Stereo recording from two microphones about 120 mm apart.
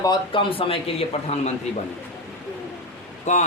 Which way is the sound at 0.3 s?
50° left (ahead or behind).